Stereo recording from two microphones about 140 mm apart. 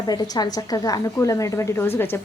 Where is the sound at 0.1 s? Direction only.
30° left (ahead or behind).